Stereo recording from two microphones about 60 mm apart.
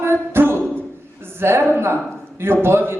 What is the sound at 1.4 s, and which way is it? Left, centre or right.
A woman's voice, right.